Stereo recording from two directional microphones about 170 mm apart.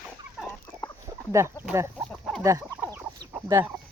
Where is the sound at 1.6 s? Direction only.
10° right (ahead or behind).